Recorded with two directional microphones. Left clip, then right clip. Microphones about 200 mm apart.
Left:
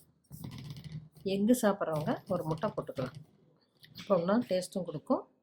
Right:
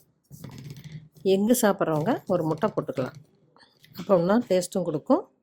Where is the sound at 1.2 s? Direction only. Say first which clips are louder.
Right 8 dB; 45° right (ahead or behind).